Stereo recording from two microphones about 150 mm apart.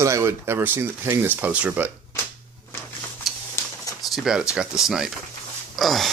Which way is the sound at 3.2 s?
Centre (ahead or behind).